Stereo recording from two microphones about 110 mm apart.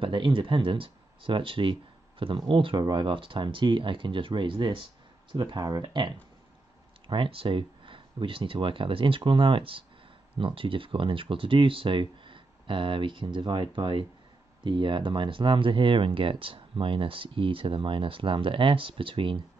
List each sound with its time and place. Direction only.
0.0 s speech: 50° right (ahead or behind)